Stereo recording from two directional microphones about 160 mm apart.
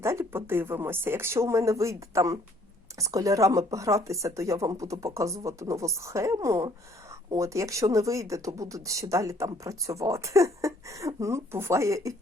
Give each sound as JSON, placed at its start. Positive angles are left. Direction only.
{"t": 0.0, "sound": "speech", "side_deg": -15}